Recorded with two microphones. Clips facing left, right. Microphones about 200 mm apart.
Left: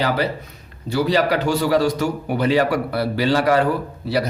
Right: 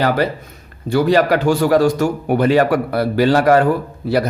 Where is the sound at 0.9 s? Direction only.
50° right (ahead or behind).